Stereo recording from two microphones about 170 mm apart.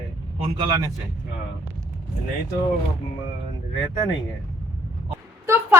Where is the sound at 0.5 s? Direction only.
25° right (ahead or behind).